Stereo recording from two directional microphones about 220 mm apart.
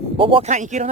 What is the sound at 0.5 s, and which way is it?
Speech, 35° right (ahead or behind).